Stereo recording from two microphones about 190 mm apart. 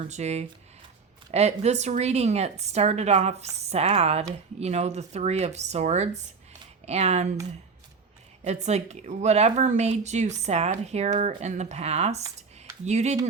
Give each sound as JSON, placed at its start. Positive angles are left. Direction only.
{"t": 0.0, "sound": "speech", "side_deg": -35}
{"t": 8.4, "sound": "speech", "side_deg": -35}